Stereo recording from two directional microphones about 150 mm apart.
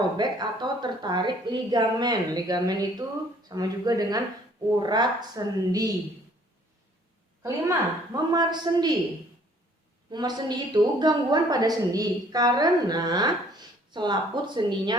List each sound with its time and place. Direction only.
0.2 s a woman's voice: 30° right (ahead or behind)
7.4 s a woman's voice: 25° right (ahead or behind)
10.1 s a woman's voice: 30° right (ahead or behind)